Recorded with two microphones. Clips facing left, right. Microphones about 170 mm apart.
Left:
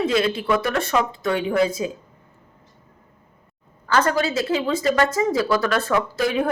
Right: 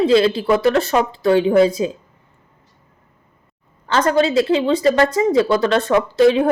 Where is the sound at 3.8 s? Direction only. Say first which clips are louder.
Right 4 dB; 25° right (ahead or behind).